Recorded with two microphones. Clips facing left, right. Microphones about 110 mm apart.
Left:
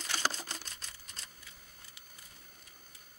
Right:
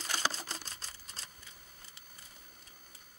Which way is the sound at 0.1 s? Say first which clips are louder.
Even; 35° right (ahead or behind).